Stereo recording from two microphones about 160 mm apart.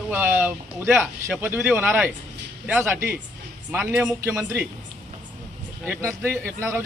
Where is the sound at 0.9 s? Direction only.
Centre (ahead or behind).